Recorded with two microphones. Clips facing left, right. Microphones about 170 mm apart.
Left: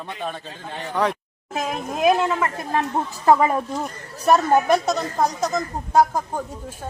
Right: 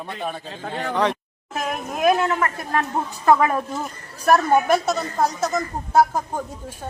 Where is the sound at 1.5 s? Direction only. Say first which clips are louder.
Left 1 dB; 20° left (ahead or behind).